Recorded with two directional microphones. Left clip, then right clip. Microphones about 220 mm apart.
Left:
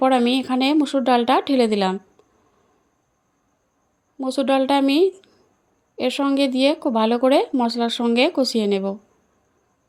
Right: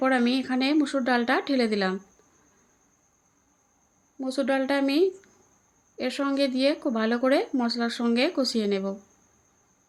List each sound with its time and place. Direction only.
0.0 s speech: 25° left (ahead or behind)
4.2 s speech: 30° left (ahead or behind)